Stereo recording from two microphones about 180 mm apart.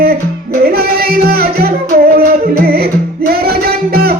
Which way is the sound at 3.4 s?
60° right (ahead or behind).